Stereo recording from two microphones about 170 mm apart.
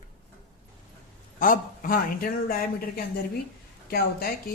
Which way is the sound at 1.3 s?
55° left (ahead or behind).